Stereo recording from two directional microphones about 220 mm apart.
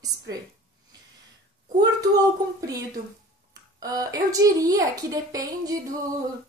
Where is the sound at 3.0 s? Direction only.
30° right (ahead or behind).